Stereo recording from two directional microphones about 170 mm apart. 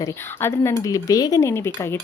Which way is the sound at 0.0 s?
15° left (ahead or behind).